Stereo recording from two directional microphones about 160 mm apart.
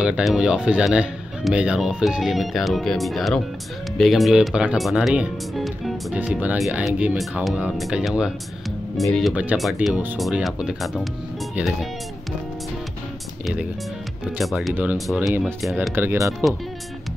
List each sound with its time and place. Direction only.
0.0 s speech: 5° right (ahead or behind)
14.4 s speech: centre (ahead or behind)
14.7 s speech: 10° right (ahead or behind)